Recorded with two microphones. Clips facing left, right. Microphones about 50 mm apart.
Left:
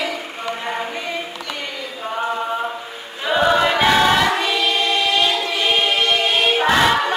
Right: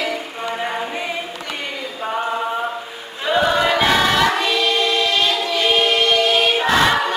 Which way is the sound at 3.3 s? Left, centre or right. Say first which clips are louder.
Left 1 dB; centre.